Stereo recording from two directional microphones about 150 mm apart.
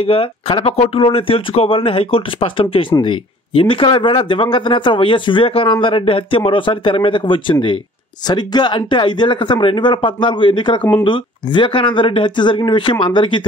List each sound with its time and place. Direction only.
0.0 s speech: 40° left (ahead or behind)